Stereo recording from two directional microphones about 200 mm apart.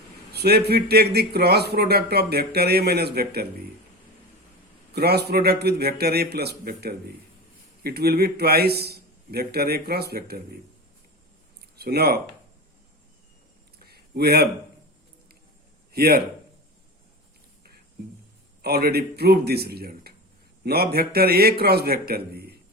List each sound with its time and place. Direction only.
0.3 s a man's voice: 55° right (ahead or behind)
4.9 s a man's voice: 55° right (ahead or behind)
11.8 s a man's voice: 50° right (ahead or behind)
13.7 s a sound: 50° right (ahead or behind)
15.9 s a man's voice: 50° right (ahead or behind)
18.6 s a man's voice: 50° right (ahead or behind)